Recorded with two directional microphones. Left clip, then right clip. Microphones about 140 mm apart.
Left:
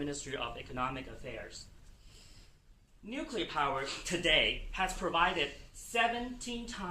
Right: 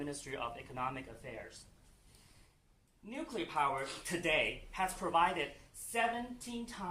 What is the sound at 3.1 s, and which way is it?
Speech, 25° right (ahead or behind).